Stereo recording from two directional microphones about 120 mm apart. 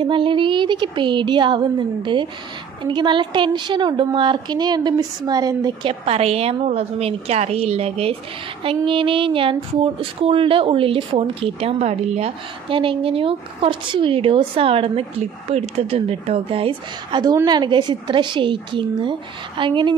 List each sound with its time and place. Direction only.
0.0 s a woman's voice: 45° right (ahead or behind)
5.9 s a woman's voice: 60° right (ahead or behind)
17.5 s a woman's voice: 35° right (ahead or behind)